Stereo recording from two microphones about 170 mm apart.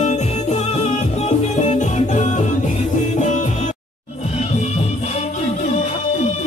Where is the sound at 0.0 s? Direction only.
40° left (ahead or behind).